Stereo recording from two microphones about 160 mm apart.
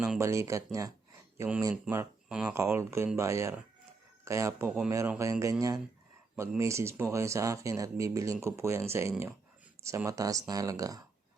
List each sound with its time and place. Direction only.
0.2 s speech: 20° right (ahead or behind)